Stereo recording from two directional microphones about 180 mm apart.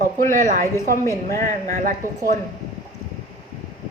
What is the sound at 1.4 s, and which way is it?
Speech, 45° right (ahead or behind).